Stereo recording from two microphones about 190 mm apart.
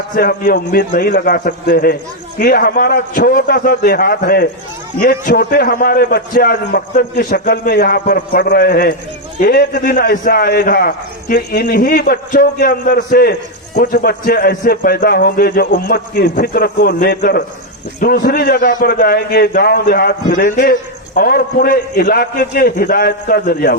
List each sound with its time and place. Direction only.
0.2 s a man's voice: 50° left (ahead or behind)